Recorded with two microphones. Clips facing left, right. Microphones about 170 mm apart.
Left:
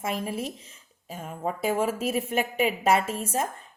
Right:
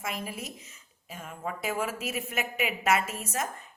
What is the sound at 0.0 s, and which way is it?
A woman's voice, 30° left (ahead or behind).